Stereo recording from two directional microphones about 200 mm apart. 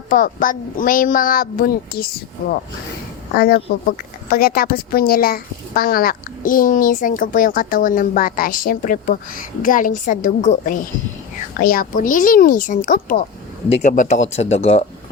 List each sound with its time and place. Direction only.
0.1 s speech: 45° left (ahead or behind)
3.8 s speech: 50° left (ahead or behind); by 14.8 s 30° left (ahead or behind)